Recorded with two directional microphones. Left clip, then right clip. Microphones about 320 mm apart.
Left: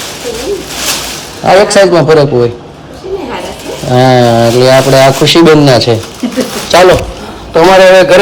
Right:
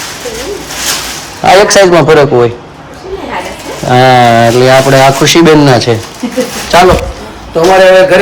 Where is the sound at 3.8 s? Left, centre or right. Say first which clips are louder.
Right 2 dB; centre.